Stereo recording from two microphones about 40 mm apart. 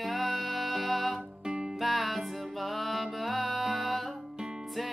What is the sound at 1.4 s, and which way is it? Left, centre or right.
Music, right.